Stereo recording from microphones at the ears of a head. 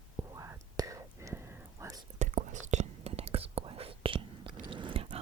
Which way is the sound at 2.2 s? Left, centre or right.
Right.